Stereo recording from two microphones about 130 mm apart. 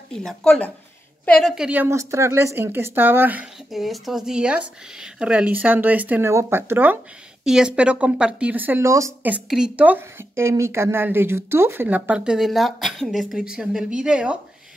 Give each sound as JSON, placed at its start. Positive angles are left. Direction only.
{"t": 0.1, "sound": "a woman's voice", "side_deg": 5}
{"t": 3.7, "sound": "a woman's voice", "side_deg": 0}
{"t": 7.4, "sound": "a woman's voice", "side_deg": -5}
{"t": 9.3, "sound": "a woman's voice", "side_deg": -10}